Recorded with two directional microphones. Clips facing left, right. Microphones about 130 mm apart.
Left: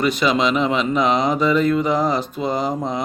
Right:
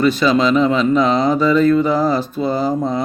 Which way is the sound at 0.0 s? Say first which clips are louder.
Right 4 dB; 15° left (ahead or behind).